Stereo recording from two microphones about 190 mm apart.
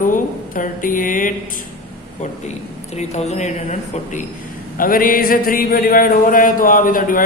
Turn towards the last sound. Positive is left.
turn(degrees=45)  # may be behind; listen again after turning